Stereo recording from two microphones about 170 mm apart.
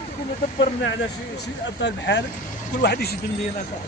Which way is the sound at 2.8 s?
70° left (ahead or behind).